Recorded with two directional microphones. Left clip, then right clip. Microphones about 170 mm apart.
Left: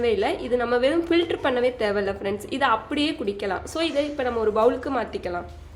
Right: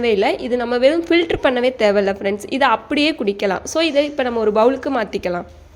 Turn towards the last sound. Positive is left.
turn(degrees=-45)  # may be behind; listen again after turning